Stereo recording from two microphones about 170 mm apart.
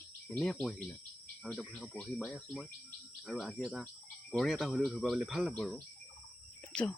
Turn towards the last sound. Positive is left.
turn(degrees=5)  # may be behind; listen again after turning